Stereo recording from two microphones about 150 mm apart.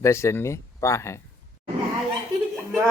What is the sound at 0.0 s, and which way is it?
Speech, 20° left (ahead or behind).